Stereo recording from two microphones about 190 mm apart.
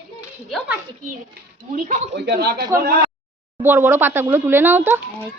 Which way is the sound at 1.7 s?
40° right (ahead or behind).